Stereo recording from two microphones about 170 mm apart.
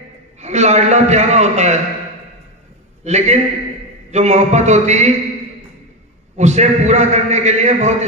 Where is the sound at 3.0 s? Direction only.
40° right (ahead or behind).